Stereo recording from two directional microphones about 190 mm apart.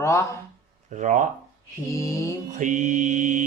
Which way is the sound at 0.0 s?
15° left (ahead or behind).